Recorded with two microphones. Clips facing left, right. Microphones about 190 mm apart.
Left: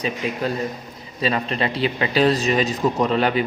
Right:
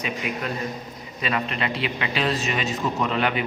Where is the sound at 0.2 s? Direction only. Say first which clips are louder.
Left 5 dB; 30° left (ahead or behind).